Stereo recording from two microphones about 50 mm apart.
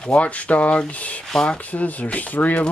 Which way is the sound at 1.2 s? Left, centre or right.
Centre.